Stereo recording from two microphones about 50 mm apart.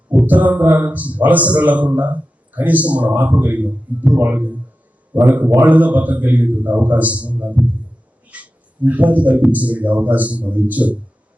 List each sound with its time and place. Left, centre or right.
0.3 s a man's voice: right